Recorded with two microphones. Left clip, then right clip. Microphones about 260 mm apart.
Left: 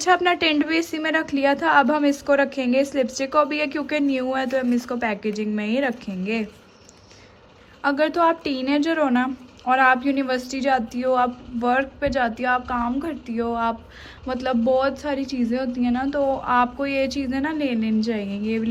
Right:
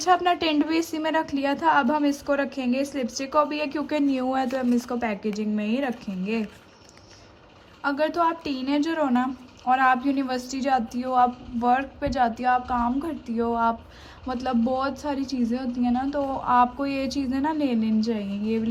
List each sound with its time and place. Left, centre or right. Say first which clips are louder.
0.0 s a woman's voice: left 2 dB; centre
7.8 s a woman's voice: left 4 dB; centre